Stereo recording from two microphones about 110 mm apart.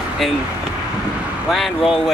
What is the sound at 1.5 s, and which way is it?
Speech, 5° right (ahead or behind).